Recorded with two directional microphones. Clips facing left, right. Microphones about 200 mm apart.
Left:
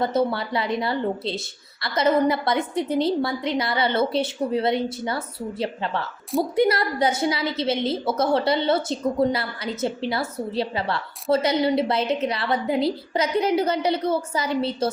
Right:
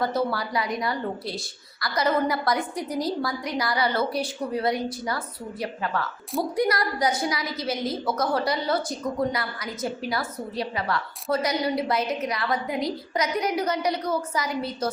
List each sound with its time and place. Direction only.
0.0 s a woman's voice: 25° left (ahead or behind)